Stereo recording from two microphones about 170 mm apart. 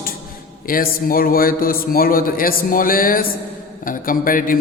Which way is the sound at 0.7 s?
60° left (ahead or behind).